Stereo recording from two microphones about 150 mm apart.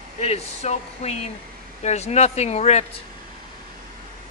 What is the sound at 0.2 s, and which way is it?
Speech, 45° left (ahead or behind).